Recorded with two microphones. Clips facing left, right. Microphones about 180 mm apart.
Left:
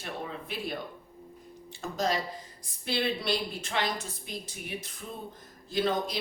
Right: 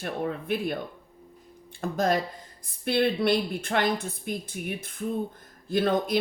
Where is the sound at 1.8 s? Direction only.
55° right (ahead or behind).